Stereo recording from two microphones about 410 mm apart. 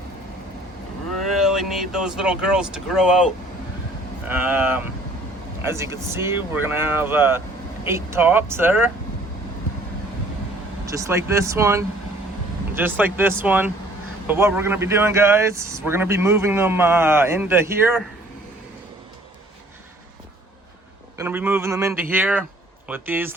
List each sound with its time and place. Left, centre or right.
1.2 s speech: centre
10.8 s speech: centre
21.2 s speech: centre